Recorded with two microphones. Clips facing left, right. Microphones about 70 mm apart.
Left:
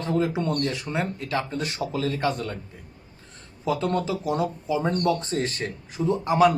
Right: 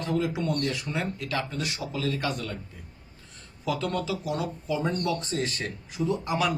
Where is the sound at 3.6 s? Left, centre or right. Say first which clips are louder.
Left 4 dB; left.